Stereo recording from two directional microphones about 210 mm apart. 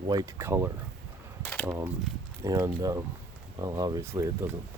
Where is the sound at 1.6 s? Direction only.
10° right (ahead or behind).